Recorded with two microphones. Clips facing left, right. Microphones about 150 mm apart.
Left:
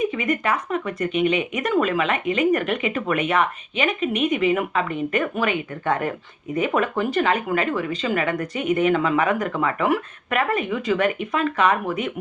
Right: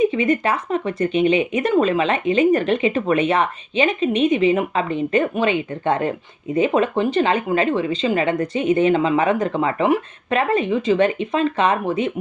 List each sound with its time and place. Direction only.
0.0 s speech: 25° right (ahead or behind)